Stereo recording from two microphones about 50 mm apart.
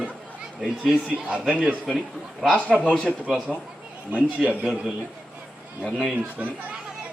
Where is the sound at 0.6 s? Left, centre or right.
Centre.